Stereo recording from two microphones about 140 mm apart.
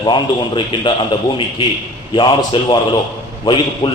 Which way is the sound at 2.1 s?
35° left (ahead or behind).